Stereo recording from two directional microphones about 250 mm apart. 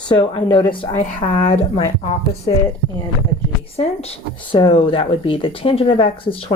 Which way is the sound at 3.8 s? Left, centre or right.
Left.